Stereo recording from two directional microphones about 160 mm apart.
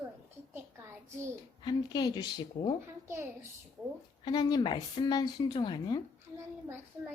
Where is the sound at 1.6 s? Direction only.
25° left (ahead or behind).